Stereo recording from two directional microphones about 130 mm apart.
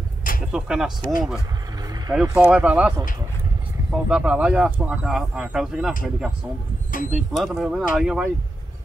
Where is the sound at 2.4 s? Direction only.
10° right (ahead or behind).